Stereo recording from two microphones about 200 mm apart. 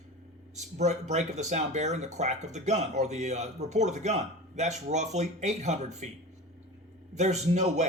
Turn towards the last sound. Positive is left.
turn(degrees=-35)  # may be behind; listen again after turning